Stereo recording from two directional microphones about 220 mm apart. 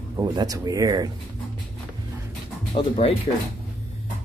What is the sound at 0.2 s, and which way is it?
Speech, 20° right (ahead or behind).